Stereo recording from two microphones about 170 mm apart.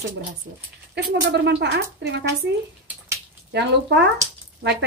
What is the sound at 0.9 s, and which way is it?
Speech, 90° right.